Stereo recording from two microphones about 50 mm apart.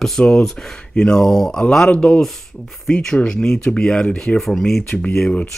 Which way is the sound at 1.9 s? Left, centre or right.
Left.